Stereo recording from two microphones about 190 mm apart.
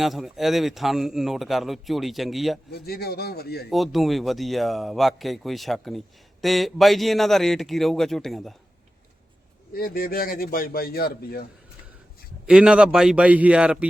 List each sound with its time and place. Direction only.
0.0 s speech: centre (ahead or behind)
2.7 s speech: 55° left (ahead or behind)
3.7 s speech: centre (ahead or behind)
9.7 s speech: 50° left (ahead or behind)
12.5 s speech: 5° right (ahead or behind)